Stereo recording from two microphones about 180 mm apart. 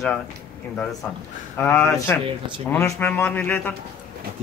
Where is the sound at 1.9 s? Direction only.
15° left (ahead or behind).